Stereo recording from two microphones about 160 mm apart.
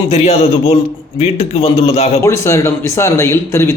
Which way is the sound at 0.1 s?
40° left (ahead or behind).